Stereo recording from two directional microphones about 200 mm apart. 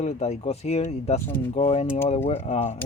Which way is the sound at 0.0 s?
35° left (ahead or behind).